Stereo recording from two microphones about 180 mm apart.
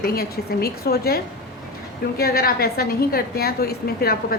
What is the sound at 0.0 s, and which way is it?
A woman's voice, 55° left (ahead or behind).